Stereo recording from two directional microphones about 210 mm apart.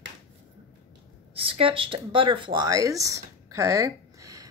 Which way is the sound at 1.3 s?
25° right (ahead or behind).